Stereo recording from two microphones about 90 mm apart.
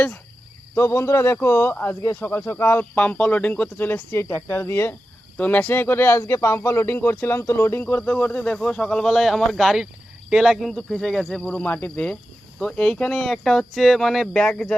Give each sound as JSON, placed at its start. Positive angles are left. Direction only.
{"t": 0.8, "sound": "speech", "side_deg": 35}
{"t": 11.3, "sound": "speech", "side_deg": 15}